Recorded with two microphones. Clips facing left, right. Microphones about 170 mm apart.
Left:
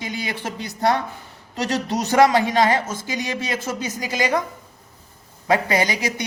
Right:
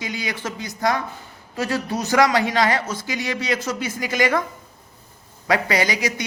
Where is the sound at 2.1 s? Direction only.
25° left (ahead or behind).